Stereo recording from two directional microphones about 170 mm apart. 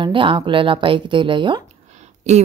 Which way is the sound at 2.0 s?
40° right (ahead or behind).